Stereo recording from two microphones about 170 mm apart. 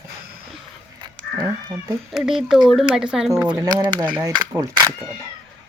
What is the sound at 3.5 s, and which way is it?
Speech, 25° right (ahead or behind).